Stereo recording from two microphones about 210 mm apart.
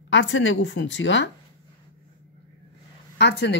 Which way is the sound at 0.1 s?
60° left (ahead or behind).